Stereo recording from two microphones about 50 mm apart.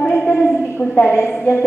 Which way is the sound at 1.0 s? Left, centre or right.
Left.